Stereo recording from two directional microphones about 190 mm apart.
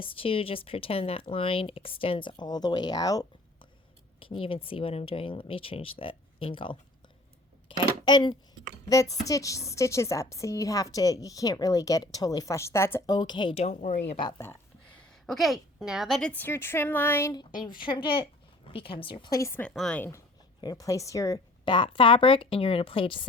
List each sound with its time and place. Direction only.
0.0 s a woman's voice: 30° left (ahead or behind)
14.1 s a woman's voice: 25° left (ahead or behind)